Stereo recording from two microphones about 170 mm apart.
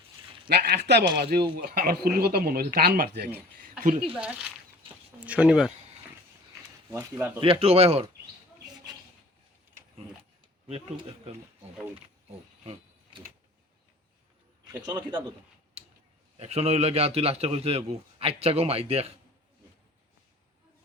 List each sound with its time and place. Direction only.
0.4 s speech: 65° right (ahead or behind)
1.6 s speech: 55° right (ahead or behind)
3.6 s a sound: 50° right (ahead or behind)
4.1 s speech: 5° right (ahead or behind)
6.9 s speech: 10° right (ahead or behind)
7.3 s a man's voice: 30° right (ahead or behind)
10.7 s a man's voice: 35° right (ahead or behind)
12.3 s wild animals: 35° right (ahead or behind)
14.8 s a man's voice: 25° right (ahead or behind)
16.4 s a man's voice: 35° right (ahead or behind)